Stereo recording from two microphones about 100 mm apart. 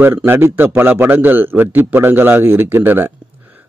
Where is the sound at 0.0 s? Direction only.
20° right (ahead or behind).